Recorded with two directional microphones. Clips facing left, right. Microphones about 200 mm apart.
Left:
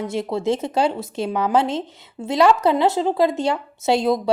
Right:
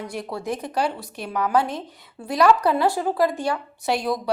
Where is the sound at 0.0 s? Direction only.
25° left (ahead or behind).